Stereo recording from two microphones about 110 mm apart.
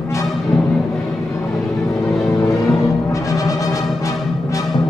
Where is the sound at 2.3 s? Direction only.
30° left (ahead or behind).